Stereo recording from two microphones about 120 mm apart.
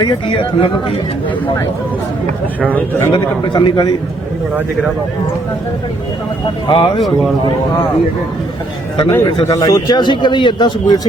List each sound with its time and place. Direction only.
0.0 s speech: 45° left (ahead or behind)
2.6 s a man's voice: 15° left (ahead or behind)
3.1 s a man's voice: 40° left (ahead or behind)
6.7 s speech: 45° left (ahead or behind)
9.0 s a man's voice: 25° left (ahead or behind)